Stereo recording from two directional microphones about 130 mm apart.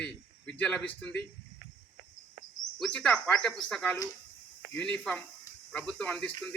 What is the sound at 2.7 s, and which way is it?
Cricket, 5° left (ahead or behind).